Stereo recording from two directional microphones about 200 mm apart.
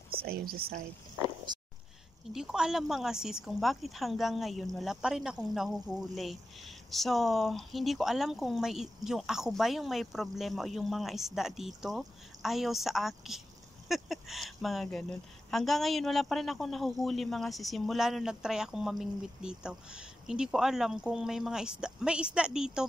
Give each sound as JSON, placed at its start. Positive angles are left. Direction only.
{"t": 0.2, "sound": "speech", "side_deg": -50}
{"t": 1.5, "sound": "a sound", "side_deg": -20}
{"t": 2.3, "sound": "speech", "side_deg": -5}